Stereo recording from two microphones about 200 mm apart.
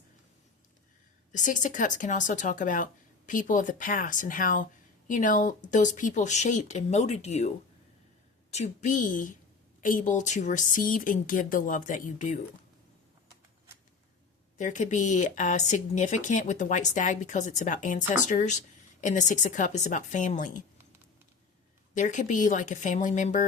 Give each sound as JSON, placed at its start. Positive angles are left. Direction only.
{"t": 1.3, "sound": "speech", "side_deg": 40}
{"t": 14.6, "sound": "speech", "side_deg": 40}
{"t": 21.9, "sound": "speech", "side_deg": 40}